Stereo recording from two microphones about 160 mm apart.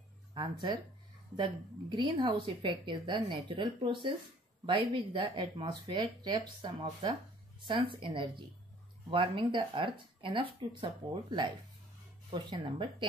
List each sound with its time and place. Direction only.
0.3 s a woman's voice: 30° right (ahead or behind)